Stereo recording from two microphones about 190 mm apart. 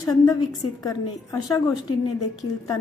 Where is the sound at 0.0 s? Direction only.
20° left (ahead or behind).